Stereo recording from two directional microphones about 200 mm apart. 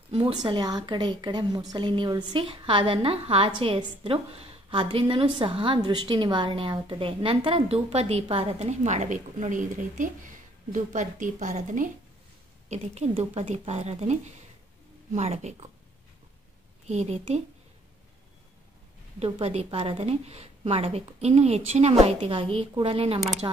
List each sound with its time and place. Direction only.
0.1 s a woman's voice: 25° right (ahead or behind)
16.8 s a woman's voice: 35° right (ahead or behind)
19.1 s a woman's voice: 30° right (ahead or behind)